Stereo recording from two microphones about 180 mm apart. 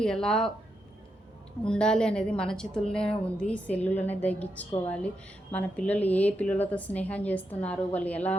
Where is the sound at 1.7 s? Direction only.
5° left (ahead or behind).